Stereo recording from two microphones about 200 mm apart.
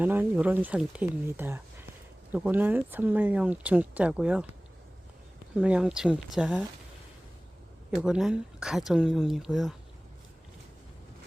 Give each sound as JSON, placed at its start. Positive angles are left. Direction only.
{"t": 0.0, "sound": "speech", "side_deg": -10}
{"t": 5.5, "sound": "speech", "side_deg": -5}
{"t": 7.9, "sound": "speech", "side_deg": -5}